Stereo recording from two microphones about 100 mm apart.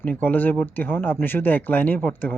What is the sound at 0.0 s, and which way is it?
Speech, 15° left (ahead or behind).